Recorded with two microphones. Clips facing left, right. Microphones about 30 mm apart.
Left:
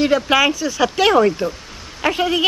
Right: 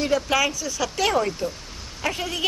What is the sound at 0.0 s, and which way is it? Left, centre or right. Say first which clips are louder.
A woman's voice: left 6 dB; left.